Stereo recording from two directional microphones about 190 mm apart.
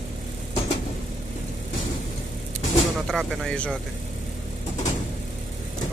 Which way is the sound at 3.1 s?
Centre (ahead or behind).